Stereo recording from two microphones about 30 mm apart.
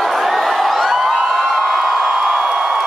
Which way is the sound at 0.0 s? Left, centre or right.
Centre.